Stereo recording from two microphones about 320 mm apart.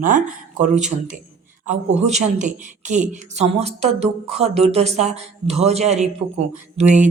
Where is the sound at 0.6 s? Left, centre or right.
Right.